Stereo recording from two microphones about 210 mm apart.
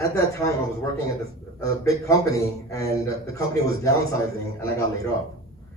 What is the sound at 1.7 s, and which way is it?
A man's voice, 15° left (ahead or behind).